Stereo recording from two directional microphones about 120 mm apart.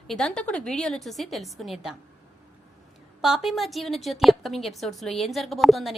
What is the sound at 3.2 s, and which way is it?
A woman's voice, 5° right (ahead or behind).